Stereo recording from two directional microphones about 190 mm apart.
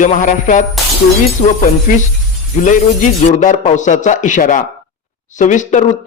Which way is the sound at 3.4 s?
40° left (ahead or behind).